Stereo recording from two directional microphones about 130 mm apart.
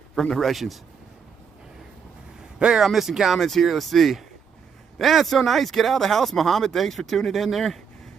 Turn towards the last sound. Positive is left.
turn(degrees=0)  # may be behind; listen again after turning